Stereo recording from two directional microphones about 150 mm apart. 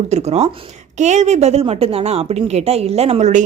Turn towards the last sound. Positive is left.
turn(degrees=-50)  # may be behind; listen again after turning